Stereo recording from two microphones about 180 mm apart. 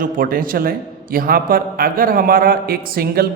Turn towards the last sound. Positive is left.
turn(degrees=-55)  # may be behind; listen again after turning